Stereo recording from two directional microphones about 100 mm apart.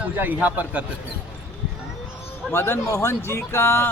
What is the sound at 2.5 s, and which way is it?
Speech, 25° left (ahead or behind).